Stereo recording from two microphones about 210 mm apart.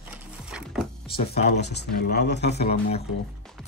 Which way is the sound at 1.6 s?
55° left (ahead or behind).